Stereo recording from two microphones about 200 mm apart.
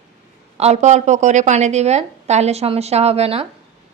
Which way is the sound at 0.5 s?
30° right (ahead or behind).